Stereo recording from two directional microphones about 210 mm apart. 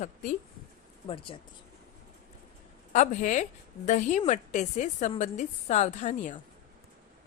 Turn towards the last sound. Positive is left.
turn(degrees=35)  # may be behind; listen again after turning